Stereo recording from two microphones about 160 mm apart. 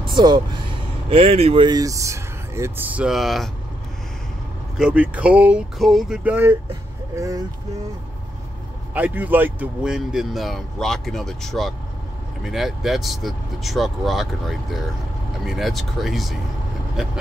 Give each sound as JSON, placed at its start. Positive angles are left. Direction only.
{"t": 0.0, "sound": "speech", "side_deg": -30}
{"t": 4.7, "sound": "speech", "side_deg": -10}
{"t": 8.9, "sound": "speech", "side_deg": -10}
{"t": 16.9, "sound": "vehicle", "side_deg": -5}